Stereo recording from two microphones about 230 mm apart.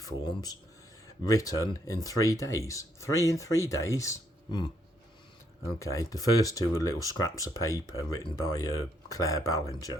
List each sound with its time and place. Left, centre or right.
0.0 s speech: centre
5.8 s speech: centre